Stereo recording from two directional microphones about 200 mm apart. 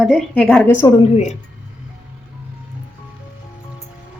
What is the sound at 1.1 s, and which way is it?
Speech, 35° left (ahead or behind).